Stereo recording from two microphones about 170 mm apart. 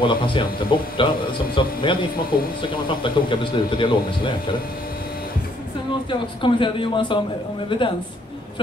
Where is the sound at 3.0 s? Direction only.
30° left (ahead or behind).